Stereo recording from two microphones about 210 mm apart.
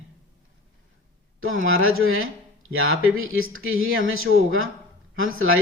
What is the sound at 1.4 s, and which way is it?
Speech, 70° right (ahead or behind).